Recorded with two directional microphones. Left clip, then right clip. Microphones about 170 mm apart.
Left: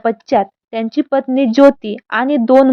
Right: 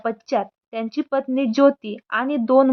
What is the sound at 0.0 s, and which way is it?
A woman's voice, 25° left (ahead or behind).